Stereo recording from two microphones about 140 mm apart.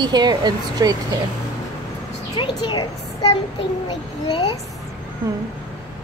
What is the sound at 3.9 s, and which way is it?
Speech, 30° left (ahead or behind).